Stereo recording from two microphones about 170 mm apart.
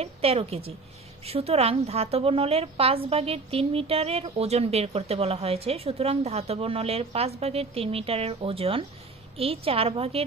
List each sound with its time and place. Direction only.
0.0 s a woman's voice: 35° right (ahead or behind)